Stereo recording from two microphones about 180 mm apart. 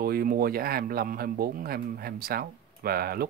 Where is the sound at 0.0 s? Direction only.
55° right (ahead or behind).